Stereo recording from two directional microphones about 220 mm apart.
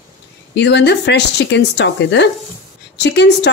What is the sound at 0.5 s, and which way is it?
A woman's voice, 50° left (ahead or behind).